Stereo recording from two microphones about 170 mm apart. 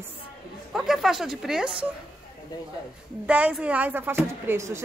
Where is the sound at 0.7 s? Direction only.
Centre (ahead or behind).